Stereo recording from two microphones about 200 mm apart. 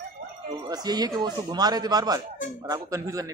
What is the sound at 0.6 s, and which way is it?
A man's voice, 20° right (ahead or behind).